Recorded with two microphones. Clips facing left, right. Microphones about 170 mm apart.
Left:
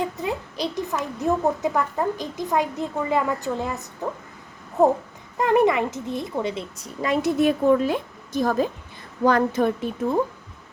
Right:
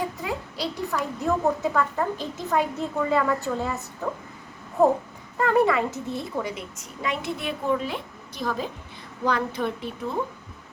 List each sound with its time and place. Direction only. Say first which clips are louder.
0.2 s a child's voice: left 3 dB; 20° left (ahead or behind)
5.4 s a woman's voice: left 2 dB; 20° left (ahead or behind); by 9.9 s 45° left (ahead or behind)